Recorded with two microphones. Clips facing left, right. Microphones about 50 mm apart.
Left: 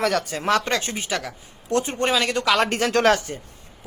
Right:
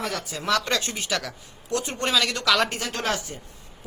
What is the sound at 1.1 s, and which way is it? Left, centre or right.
Speech, centre.